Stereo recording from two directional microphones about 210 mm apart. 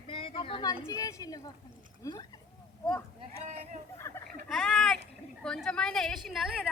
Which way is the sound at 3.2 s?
30° right (ahead or behind).